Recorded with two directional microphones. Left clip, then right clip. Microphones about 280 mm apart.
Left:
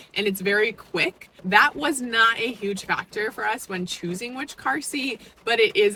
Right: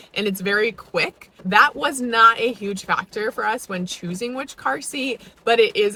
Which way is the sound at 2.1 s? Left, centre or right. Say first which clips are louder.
Right 6 dB; centre.